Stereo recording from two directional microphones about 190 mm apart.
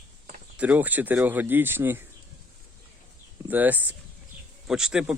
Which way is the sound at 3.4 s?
10° right (ahead or behind).